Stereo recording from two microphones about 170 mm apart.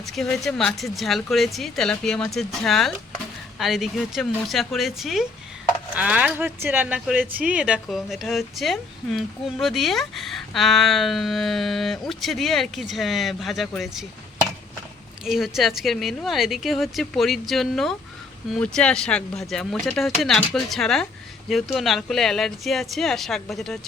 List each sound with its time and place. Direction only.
0.0 s speech: centre (ahead or behind)
15.2 s speech: centre (ahead or behind)